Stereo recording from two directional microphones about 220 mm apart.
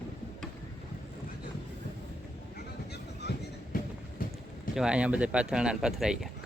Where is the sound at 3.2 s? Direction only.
50° left (ahead or behind).